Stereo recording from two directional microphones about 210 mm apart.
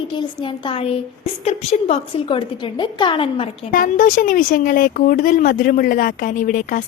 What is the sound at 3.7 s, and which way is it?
A woman's voice, 40° left (ahead or behind).